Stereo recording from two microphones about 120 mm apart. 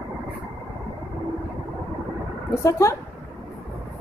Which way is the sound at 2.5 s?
25° left (ahead or behind).